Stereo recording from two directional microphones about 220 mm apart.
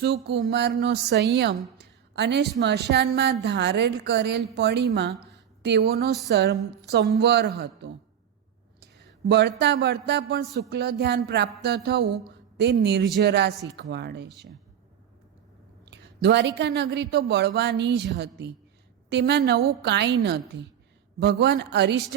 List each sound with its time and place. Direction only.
0.0 s a woman's voice: 50° right (ahead or behind)
15.9 s a woman's voice: 50° right (ahead or behind)